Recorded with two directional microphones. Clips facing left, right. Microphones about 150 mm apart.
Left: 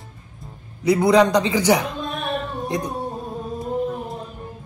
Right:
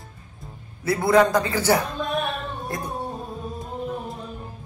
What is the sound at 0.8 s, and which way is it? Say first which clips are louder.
A man's voice: left 3 dB; 20° left (ahead or behind).